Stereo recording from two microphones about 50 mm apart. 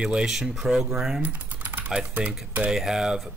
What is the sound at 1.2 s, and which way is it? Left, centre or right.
Typing, right.